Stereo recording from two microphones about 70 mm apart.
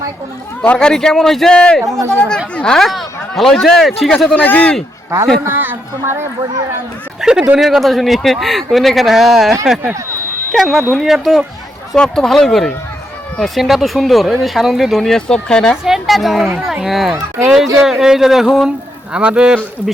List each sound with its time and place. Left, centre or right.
0.8 s a man's voice: centre
1.8 s speech: right
2.0 s a man's voice: centre
4.4 s a man's voice: left
5.5 s speech: right
7.2 s speech: centre
11.9 s a man's voice: centre
13.4 s speech: centre
15.7 s speech: centre
19.1 s speech: centre